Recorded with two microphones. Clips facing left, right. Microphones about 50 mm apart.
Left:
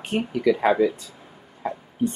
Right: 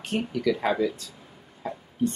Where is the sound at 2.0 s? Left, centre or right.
Centre.